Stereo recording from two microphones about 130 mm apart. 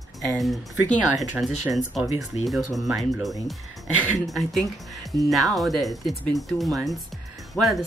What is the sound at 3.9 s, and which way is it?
Speech, 15° right (ahead or behind).